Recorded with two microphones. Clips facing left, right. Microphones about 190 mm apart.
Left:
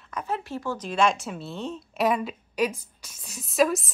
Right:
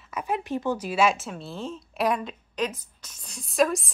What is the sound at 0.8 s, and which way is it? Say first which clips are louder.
A woman's voice: left 2 dB; 5° right (ahead or behind).